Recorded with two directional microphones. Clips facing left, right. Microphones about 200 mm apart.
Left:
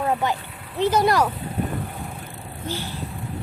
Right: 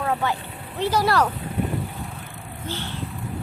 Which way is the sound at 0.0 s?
20° left (ahead or behind).